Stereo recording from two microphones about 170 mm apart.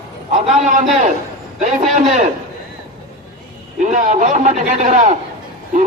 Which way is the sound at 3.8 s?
45° right (ahead or behind).